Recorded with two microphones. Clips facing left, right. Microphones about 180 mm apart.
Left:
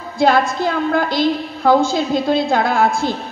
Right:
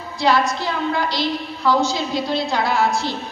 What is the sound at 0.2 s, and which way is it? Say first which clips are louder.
A woman's voice: left 4 dB; 50° left (ahead or behind).